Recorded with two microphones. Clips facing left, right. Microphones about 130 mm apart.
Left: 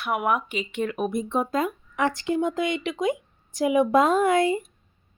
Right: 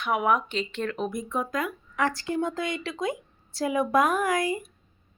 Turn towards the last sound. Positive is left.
turn(degrees=25)  # may be behind; listen again after turning